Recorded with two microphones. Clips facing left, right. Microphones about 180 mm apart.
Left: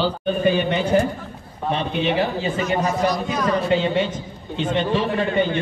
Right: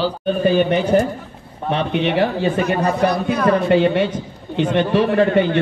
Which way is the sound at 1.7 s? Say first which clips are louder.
Right 3 dB; 70° right (ahead or behind).